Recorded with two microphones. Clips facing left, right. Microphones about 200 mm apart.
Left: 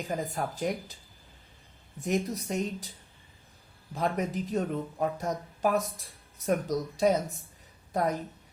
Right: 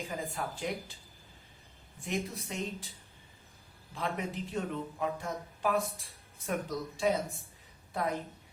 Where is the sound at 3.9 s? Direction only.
45° left (ahead or behind).